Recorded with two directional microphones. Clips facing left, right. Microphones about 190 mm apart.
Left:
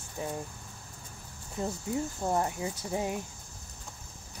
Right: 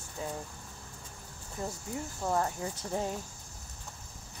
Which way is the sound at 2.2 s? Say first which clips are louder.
Right 1 dB; 15° left (ahead or behind).